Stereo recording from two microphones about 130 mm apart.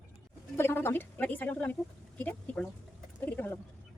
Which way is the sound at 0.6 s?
20° left (ahead or behind).